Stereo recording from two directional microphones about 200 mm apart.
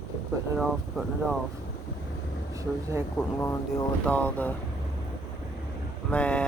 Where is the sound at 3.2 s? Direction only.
10° left (ahead or behind).